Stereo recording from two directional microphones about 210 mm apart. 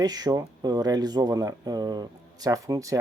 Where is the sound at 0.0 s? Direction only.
20° right (ahead or behind).